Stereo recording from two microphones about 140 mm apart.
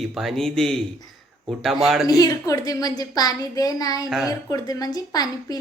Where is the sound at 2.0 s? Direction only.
25° left (ahead or behind).